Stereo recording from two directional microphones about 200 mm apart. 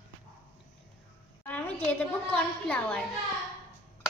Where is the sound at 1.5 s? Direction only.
10° left (ahead or behind).